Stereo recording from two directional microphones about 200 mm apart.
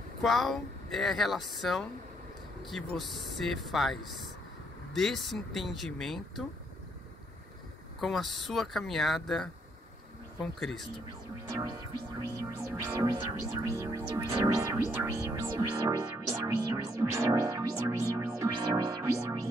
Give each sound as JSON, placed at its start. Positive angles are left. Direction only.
{"t": 0.2, "sound": "speech", "side_deg": 0}
{"t": 8.0, "sound": "speech", "side_deg": 0}
{"t": 12.2, "sound": "music", "side_deg": -15}